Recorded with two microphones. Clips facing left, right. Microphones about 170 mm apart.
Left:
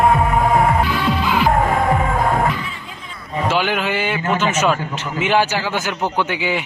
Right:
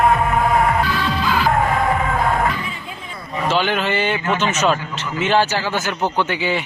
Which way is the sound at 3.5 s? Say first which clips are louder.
Right 1 dB; 10° left (ahead or behind).